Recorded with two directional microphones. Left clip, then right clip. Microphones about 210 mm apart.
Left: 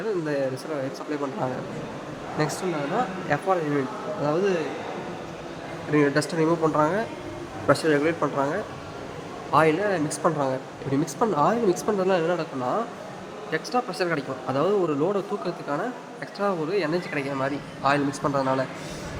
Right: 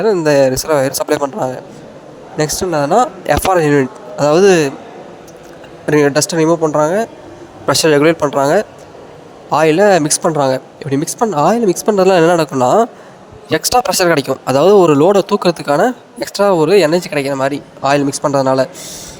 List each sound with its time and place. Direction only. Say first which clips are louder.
0.0 s speech: right 16 dB; 50° right (ahead or behind)
2.4 s speech: right 11 dB; 40° right (ahead or behind)
3.2 s speech: right 13 dB; 55° right (ahead or behind)
5.9 s speech: right 11 dB; 50° right (ahead or behind); by 6.7 s 30° right (ahead or behind)
6.7 s speech: right 10 dB; 40° right (ahead or behind)